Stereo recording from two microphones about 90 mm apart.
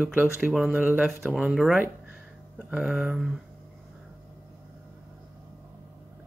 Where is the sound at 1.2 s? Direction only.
5° right (ahead or behind).